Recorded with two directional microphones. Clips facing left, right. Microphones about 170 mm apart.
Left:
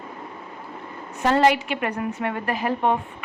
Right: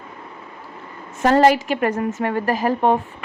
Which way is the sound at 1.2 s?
45° right (ahead or behind).